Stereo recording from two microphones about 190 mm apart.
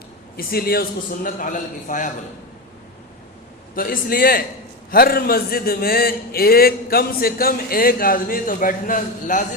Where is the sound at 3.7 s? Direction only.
50° left (ahead or behind).